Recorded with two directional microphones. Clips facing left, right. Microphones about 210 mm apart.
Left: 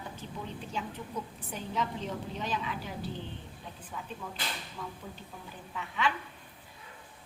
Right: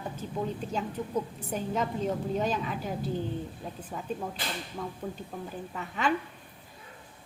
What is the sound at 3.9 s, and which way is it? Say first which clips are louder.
A woman's voice: right 6 dB; 45° right (ahead or behind).